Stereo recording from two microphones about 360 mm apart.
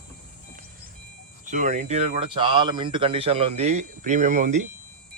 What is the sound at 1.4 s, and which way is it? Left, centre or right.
Speech, right.